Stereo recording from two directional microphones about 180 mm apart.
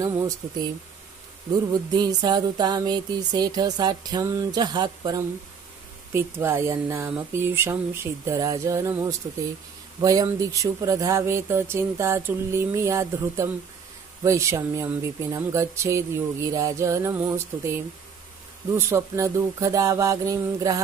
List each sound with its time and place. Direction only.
0.0 s a sound: 20° right (ahead or behind)
6.1 s speech: 15° right (ahead or behind)
18.8 s speech: 15° right (ahead or behind)